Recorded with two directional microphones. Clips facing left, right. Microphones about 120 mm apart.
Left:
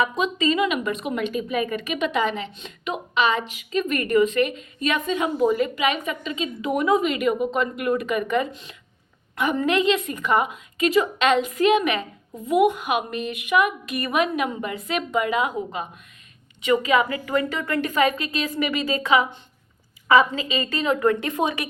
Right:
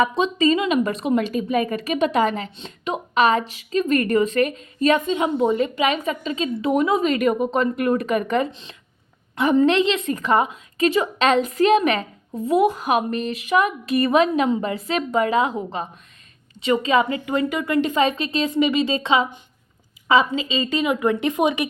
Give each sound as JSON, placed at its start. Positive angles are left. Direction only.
{"t": 0.0, "sound": "a woman's voice", "side_deg": -30}
{"t": 7.1, "sound": "a woman's voice", "side_deg": -40}